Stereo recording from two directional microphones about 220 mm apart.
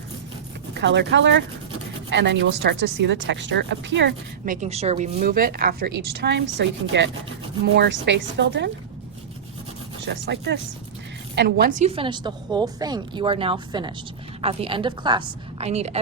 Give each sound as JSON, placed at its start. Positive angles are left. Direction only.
{"t": 0.7, "sound": "speech", "side_deg": -50}
{"t": 4.4, "sound": "a woman's voice", "side_deg": -35}
{"t": 10.0, "sound": "a woman's voice", "side_deg": -50}